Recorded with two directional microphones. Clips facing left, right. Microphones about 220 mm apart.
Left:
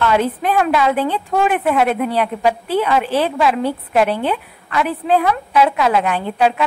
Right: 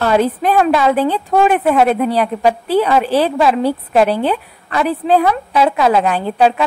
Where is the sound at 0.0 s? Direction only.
35° right (ahead or behind).